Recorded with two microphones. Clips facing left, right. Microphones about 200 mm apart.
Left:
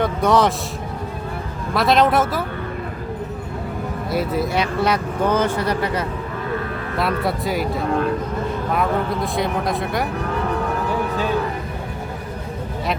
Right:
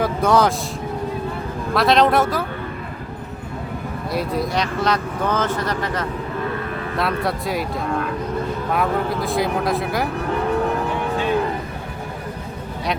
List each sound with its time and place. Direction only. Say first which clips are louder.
0.0 s vehicle: even; centre (ahead or behind)
1.7 s speech: even; centre (ahead or behind)
4.1 s speech: left 1 dB; centre (ahead or behind)
8.7 s speech: even; centre (ahead or behind)